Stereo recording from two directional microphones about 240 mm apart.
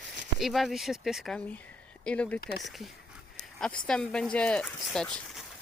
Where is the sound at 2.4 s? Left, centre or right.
Left.